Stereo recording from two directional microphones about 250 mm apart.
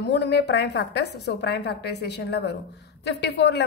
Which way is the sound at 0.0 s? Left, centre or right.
Left.